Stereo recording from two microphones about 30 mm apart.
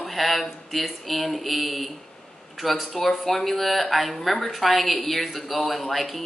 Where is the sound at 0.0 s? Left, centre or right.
Centre.